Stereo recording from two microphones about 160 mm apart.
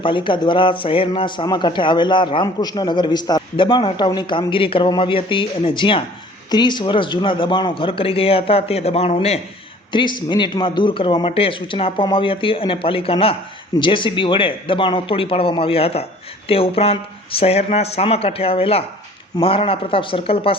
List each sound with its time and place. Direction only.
0.0 s a man's voice: 30° left (ahead or behind)
9.9 s a man's voice: 30° left (ahead or behind)